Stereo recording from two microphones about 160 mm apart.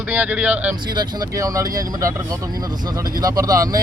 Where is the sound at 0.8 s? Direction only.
25° right (ahead or behind).